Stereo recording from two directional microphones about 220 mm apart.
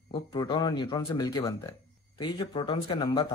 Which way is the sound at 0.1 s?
20° left (ahead or behind).